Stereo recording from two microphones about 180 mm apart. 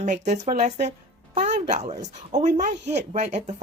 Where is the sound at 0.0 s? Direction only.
45° right (ahead or behind).